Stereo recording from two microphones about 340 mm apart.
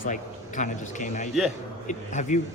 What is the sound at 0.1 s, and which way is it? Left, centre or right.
Speech, left.